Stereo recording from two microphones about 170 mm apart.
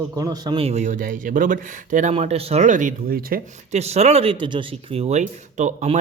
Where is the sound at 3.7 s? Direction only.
40° right (ahead or behind).